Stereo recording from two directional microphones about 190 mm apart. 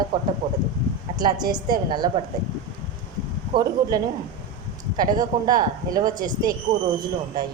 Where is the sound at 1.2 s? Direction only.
20° right (ahead or behind).